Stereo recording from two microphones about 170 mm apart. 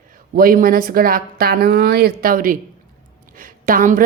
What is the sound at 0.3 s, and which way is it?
A woman's voice, 60° right (ahead or behind).